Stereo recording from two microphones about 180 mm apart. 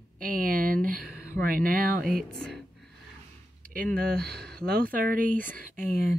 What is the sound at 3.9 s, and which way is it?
Speech, 60° right (ahead or behind).